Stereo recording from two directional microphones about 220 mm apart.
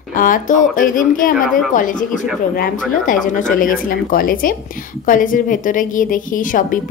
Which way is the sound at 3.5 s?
40° left (ahead or behind).